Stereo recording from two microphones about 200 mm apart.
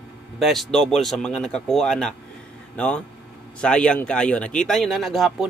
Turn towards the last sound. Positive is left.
turn(degrees=0)  # may be behind; listen again after turning